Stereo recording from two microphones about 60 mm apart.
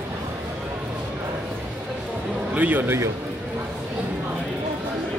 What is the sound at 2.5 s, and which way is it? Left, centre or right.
Speech, right.